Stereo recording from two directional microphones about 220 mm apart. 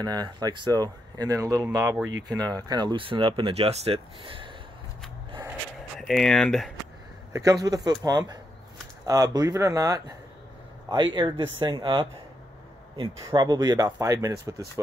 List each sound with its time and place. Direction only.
0.0 s speech: 20° right (ahead or behind)
5.9 s speech: centre (ahead or behind)
7.3 s speech: 15° right (ahead or behind)